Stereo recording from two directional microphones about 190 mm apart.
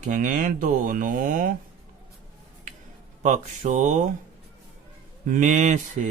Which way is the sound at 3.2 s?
40° right (ahead or behind).